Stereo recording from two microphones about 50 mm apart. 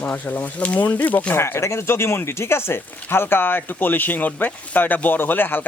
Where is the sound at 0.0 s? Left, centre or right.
Left.